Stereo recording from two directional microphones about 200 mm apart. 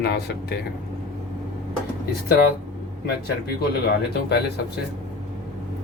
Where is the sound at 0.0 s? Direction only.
55° left (ahead or behind).